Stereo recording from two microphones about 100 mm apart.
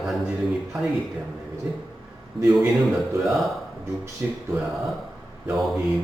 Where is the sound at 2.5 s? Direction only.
Centre (ahead or behind).